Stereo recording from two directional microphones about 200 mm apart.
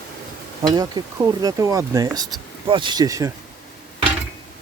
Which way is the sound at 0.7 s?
20° right (ahead or behind).